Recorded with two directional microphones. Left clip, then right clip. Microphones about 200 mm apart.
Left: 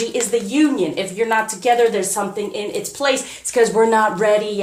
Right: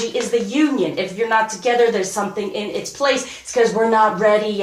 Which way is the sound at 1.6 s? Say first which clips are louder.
Left 4 dB; 50° left (ahead or behind).